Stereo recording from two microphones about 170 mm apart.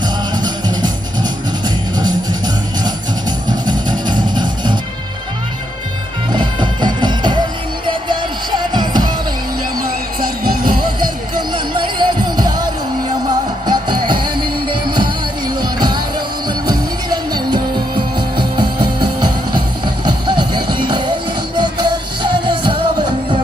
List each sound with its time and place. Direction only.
0.4 s music: 25° right (ahead or behind)
6.3 s music: 25° right (ahead or behind)
9.7 s music: 60° right (ahead or behind)
11.3 s music: 25° right (ahead or behind)